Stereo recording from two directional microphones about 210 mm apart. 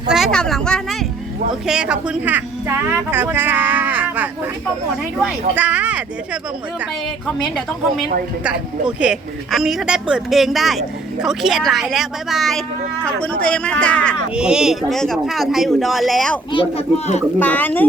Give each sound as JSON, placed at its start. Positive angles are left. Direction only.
{"t": 0.1, "sound": "a woman's voice", "side_deg": 0}
{"t": 8.4, "sound": "a woman's voice", "side_deg": -5}
{"t": 16.5, "sound": "speech", "side_deg": 25}
{"t": 17.4, "sound": "speech", "side_deg": 10}